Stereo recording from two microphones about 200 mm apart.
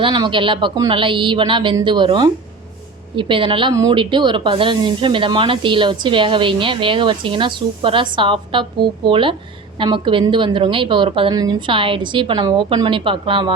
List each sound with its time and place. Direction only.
0.0 s speech: 25° right (ahead or behind)